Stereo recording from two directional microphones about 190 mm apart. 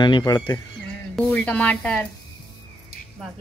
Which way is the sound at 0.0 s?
20° left (ahead or behind).